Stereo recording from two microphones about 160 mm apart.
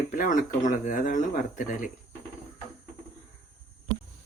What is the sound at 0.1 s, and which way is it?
Speech, 55° left (ahead or behind).